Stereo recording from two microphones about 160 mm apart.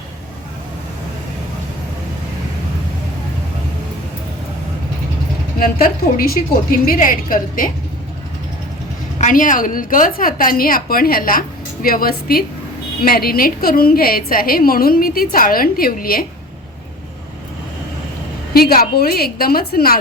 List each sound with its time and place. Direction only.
5.5 s a woman's voice: 65° left (ahead or behind)
9.1 s a woman's voice: 55° left (ahead or behind)
18.5 s a woman's voice: 70° left (ahead or behind)